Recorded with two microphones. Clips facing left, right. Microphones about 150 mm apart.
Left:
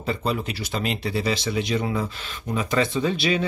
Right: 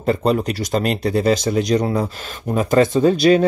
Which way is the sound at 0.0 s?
45° right (ahead or behind).